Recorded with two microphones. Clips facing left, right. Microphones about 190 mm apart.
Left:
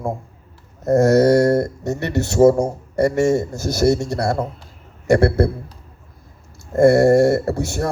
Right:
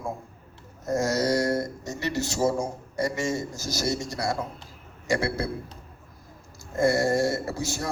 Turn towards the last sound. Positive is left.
turn(degrees=60)  # may be behind; listen again after turning